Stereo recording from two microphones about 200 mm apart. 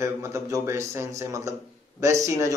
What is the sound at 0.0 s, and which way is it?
Speech, 15° right (ahead or behind).